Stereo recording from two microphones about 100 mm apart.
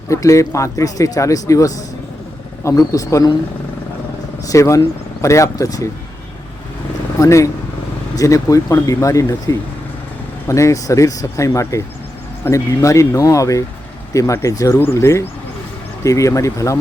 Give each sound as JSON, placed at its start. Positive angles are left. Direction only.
{"t": 0.1, "sound": "speech", "side_deg": 30}
{"t": 4.4, "sound": "speech", "side_deg": 30}
{"t": 7.2, "sound": "speech", "side_deg": 30}